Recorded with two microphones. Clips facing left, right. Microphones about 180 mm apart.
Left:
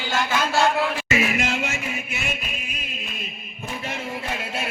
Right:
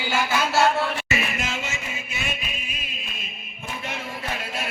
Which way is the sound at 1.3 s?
75° left (ahead or behind).